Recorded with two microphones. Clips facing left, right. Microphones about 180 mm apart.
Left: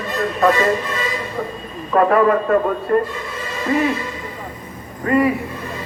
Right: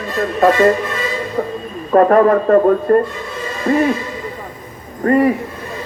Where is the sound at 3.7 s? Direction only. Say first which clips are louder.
Right 4 dB; 35° right (ahead or behind).